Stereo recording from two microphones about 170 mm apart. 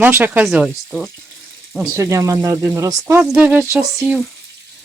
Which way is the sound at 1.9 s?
15° right (ahead or behind).